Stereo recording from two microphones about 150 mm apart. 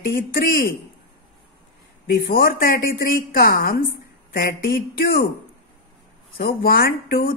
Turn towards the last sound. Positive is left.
turn(degrees=85)